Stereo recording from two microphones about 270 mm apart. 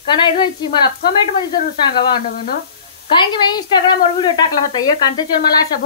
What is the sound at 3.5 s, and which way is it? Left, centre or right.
Speech, centre.